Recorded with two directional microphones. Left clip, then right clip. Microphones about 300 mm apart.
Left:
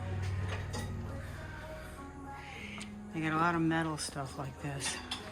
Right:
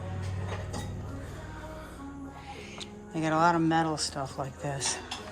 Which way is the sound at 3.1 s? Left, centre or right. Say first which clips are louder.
Right 6 dB; centre.